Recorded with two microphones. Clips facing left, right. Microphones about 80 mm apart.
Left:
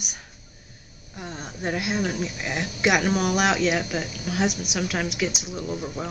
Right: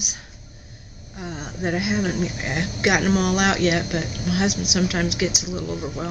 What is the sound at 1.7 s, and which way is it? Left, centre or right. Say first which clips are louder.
Speech: right 3 dB; centre.